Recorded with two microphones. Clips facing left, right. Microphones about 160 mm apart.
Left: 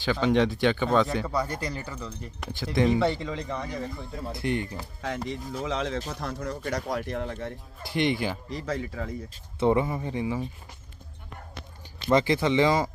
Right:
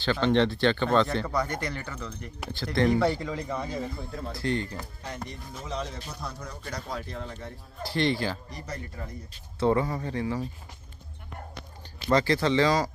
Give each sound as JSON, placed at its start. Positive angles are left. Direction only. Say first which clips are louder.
{"t": 0.0, "sound": "speech", "louder": "even", "side_deg": 10}
{"t": 2.8, "sound": "speech", "louder": "even", "side_deg": 0}
{"t": 4.3, "sound": "speech", "louder": "left 1 dB", "side_deg": 20}
{"t": 5.0, "sound": "speech", "louder": "left 10 dB", "side_deg": 90}
{"t": 6.5, "sound": "speech", "louder": "left 8 dB", "side_deg": 50}
{"t": 6.7, "sound": "speech", "louder": "left 3 dB", "side_deg": 75}
{"t": 7.9, "sound": "speech", "louder": "left 1 dB", "side_deg": 20}
{"t": 8.4, "sound": "speech", "louder": "left 7 dB", "side_deg": 90}
{"t": 9.6, "sound": "speech", "louder": "left 1 dB", "side_deg": 15}
{"t": 12.1, "sound": "speech", "louder": "left 1 dB", "side_deg": 20}